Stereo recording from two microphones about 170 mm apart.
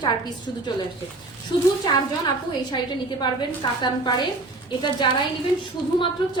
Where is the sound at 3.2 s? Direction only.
25° left (ahead or behind).